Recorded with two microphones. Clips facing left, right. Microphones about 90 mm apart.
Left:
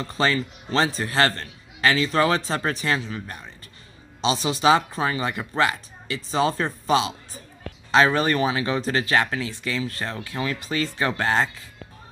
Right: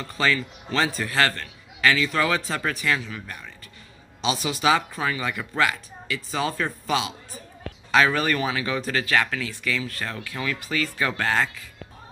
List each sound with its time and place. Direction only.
0.0 s a man's voice: 30° left (ahead or behind)